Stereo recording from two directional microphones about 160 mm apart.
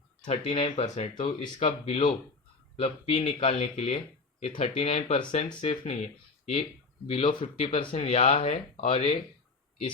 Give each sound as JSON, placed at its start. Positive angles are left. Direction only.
{"t": 0.3, "sound": "speech", "side_deg": 40}